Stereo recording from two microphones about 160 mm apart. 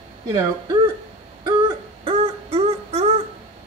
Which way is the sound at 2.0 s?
35° right (ahead or behind).